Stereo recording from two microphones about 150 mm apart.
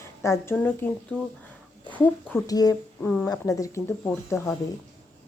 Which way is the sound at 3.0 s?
10° left (ahead or behind).